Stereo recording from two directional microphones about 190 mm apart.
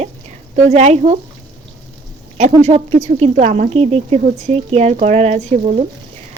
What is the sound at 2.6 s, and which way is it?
A woman's voice, 35° right (ahead or behind).